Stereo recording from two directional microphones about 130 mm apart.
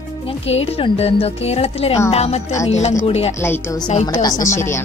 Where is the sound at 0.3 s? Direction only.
50° left (ahead or behind).